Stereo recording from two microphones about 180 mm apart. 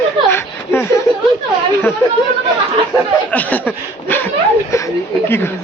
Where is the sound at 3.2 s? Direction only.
10° left (ahead or behind).